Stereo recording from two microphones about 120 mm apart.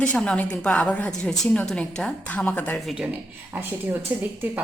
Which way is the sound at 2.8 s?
5° right (ahead or behind).